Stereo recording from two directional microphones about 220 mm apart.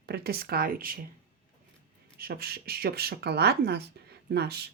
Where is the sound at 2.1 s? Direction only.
45° right (ahead or behind).